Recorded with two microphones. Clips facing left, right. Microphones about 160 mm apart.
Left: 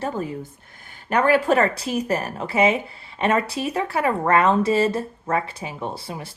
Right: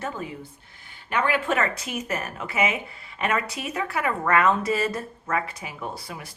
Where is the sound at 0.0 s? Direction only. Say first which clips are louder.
Left 6 dB; 40° left (ahead or behind).